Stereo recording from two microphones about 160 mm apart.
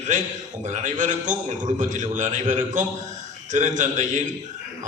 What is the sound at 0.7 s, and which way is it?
A man's voice, 50° right (ahead or behind).